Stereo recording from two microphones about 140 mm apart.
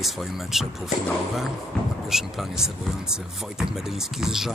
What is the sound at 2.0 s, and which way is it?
Speech, centre (ahead or behind).